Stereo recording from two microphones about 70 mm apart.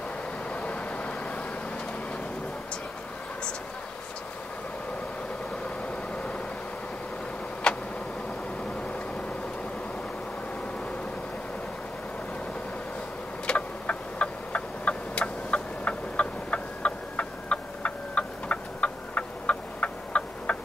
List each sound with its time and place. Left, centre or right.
0.5 s vehicle: centre
6.1 s vehicle: centre
7.7 s vehicle: centre
13.5 s tick-tock: centre